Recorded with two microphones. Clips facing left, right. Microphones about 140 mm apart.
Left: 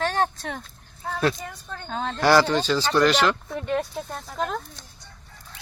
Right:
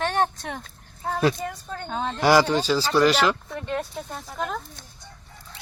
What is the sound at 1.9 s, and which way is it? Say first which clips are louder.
Speech: even; 10° right (ahead or behind).